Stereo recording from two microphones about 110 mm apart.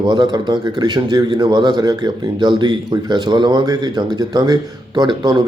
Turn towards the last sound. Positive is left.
turn(degrees=-40)  # may be behind; listen again after turning